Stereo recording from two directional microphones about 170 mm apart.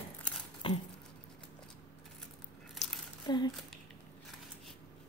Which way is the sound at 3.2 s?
25° left (ahead or behind).